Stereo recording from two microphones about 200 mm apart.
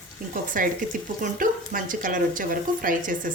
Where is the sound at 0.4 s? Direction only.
40° right (ahead or behind).